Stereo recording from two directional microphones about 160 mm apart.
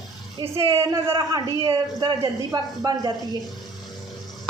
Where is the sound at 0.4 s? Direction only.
25° right (ahead or behind).